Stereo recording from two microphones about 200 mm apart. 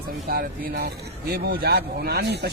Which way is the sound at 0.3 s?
45° right (ahead or behind).